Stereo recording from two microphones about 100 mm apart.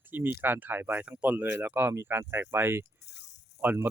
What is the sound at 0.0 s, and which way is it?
Speech, 20° right (ahead or behind).